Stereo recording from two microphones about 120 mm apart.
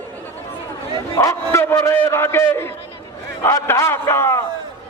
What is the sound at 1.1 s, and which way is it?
A man's voice, 25° left (ahead or behind).